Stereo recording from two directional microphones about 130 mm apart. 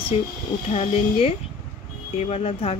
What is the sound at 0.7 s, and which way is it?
Speech, 50° left (ahead or behind).